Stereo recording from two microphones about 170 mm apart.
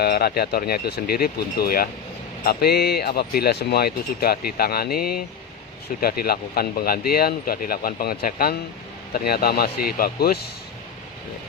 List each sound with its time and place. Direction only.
0.0 s speech: 70° left (ahead or behind)